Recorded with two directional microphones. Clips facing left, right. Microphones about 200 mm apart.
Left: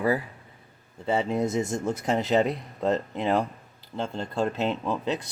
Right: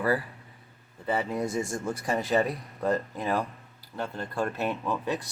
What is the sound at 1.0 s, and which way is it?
Speech, 25° left (ahead or behind).